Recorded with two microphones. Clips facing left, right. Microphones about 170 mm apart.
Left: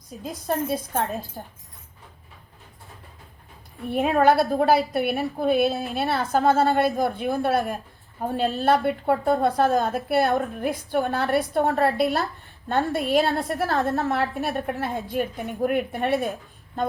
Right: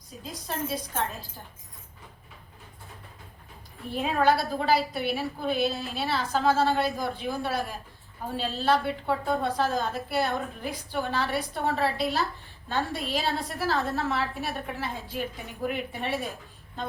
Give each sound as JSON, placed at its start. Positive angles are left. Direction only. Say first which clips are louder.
{"t": 0.5, "sound": "a woman's voice", "louder": "left 8 dB", "side_deg": 50}
{"t": 3.8, "sound": "a woman's voice", "louder": "left 5 dB", "side_deg": 65}